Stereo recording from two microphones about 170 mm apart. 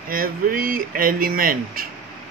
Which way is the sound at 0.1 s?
60° right (ahead or behind).